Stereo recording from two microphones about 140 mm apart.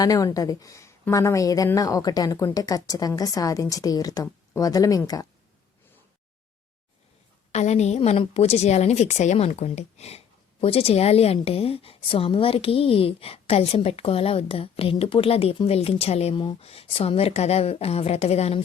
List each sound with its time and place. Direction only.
0.0 s speech: 25° left (ahead or behind)
7.5 s a woman's voice: 55° left (ahead or behind)